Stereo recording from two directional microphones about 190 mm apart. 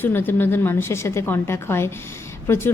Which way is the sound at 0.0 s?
10° left (ahead or behind).